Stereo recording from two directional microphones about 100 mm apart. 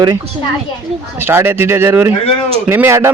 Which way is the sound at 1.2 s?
20° right (ahead or behind).